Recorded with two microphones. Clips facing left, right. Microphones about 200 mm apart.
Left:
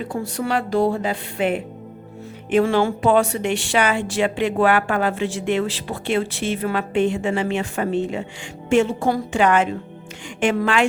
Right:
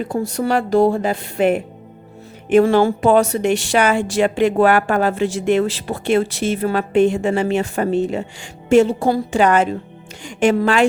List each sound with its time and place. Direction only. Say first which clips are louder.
0.1 s a woman's voice: right 4 dB; 40° right (ahead or behind)